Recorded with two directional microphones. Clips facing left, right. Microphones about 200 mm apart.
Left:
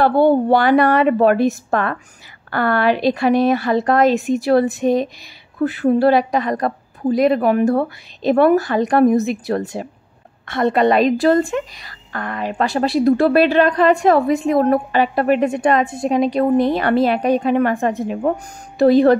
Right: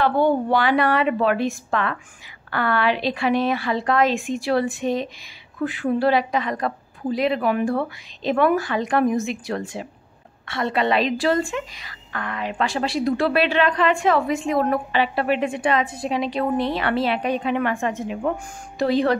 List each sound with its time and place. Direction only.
0.0 s a woman's voice: 35° left (ahead or behind)